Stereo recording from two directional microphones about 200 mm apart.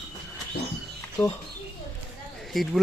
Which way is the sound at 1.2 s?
5° left (ahead or behind).